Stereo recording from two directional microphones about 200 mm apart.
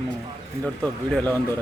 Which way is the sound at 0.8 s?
5° left (ahead or behind).